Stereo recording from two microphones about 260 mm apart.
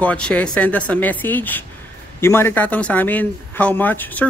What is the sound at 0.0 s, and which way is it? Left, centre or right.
A man's voice, centre.